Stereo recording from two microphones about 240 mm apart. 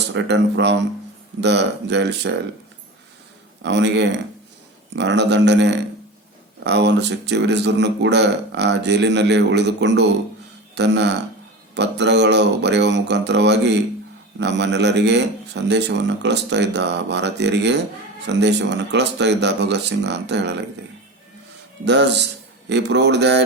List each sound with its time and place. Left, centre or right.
0.1 s speech: right
3.6 s speech: right
21.8 s speech: right